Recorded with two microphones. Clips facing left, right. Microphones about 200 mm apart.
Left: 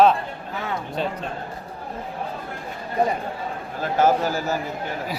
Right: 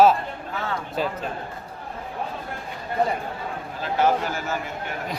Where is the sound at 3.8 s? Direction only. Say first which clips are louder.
Left 3 dB; 40° left (ahead or behind).